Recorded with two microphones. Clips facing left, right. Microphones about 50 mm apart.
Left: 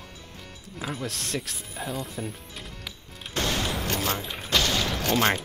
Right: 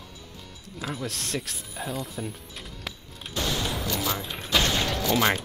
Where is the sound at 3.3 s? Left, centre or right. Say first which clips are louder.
Left 1 dB; left.